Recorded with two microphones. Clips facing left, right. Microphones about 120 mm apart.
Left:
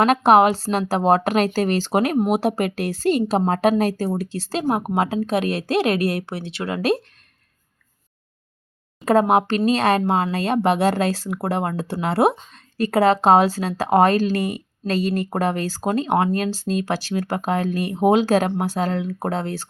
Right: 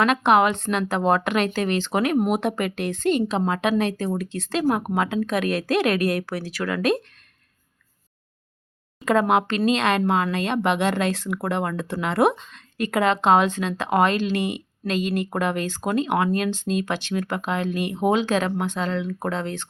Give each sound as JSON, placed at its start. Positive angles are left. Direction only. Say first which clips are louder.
{"t": 0.0, "sound": "speech", "louder": "left 4 dB", "side_deg": 35}
{"t": 9.0, "sound": "speech", "louder": "left 3 dB", "side_deg": 35}